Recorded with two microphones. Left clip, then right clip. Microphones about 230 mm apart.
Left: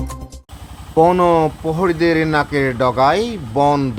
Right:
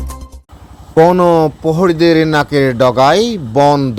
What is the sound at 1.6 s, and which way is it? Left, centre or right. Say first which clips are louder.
Speech: right 5 dB; right.